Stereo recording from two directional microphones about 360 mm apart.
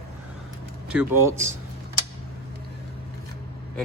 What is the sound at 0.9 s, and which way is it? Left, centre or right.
Speech, centre.